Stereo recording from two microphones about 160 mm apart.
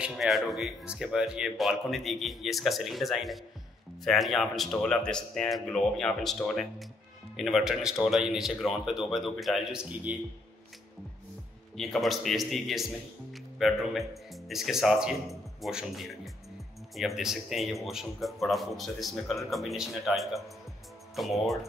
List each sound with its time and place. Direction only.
0.0 s speech: centre (ahead or behind)
11.7 s speech: centre (ahead or behind)